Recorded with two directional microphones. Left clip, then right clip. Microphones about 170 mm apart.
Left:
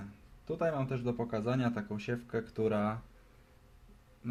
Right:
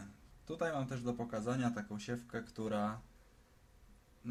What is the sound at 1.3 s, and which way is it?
Speech, 25° left (ahead or behind).